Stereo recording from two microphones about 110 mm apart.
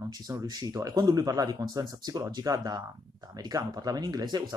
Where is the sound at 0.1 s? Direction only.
35° right (ahead or behind).